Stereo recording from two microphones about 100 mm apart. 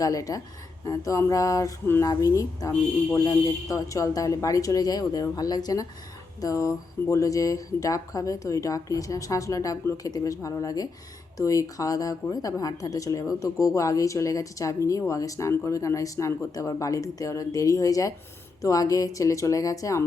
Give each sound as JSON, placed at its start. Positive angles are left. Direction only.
{"t": 0.0, "sound": "a woman's voice", "side_deg": 35}